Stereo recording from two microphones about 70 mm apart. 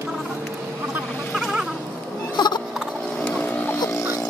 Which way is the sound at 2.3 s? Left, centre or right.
Left.